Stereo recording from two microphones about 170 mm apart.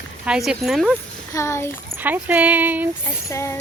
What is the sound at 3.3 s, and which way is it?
Speech, 15° left (ahead or behind).